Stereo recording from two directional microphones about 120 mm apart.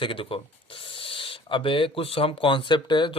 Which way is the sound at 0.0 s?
50° left (ahead or behind).